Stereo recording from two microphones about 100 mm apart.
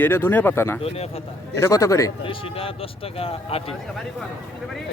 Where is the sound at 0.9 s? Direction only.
85° left.